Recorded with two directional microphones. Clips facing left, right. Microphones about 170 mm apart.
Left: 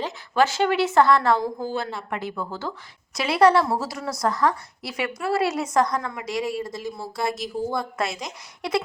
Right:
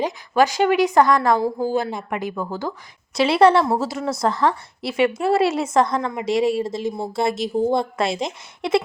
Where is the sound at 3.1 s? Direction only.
30° right (ahead or behind).